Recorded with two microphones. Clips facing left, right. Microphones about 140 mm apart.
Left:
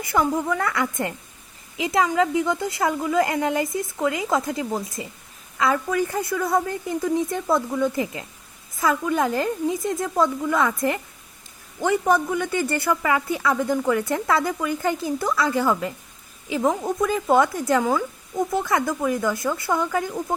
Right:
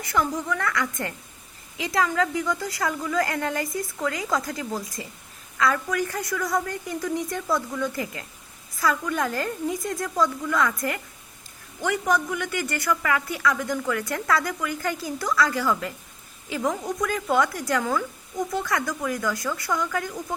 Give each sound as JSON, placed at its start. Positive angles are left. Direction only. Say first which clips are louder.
{"t": 0.0, "sound": "speech", "louder": "left 4 dB", "side_deg": 25}